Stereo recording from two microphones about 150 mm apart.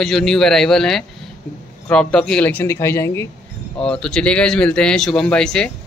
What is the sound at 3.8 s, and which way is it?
Speech, 5° left (ahead or behind).